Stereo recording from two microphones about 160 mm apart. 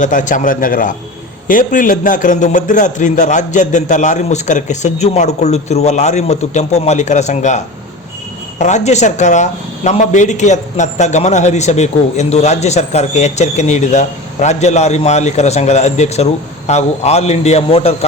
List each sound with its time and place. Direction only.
0.0 s a man's voice: 55° left (ahead or behind)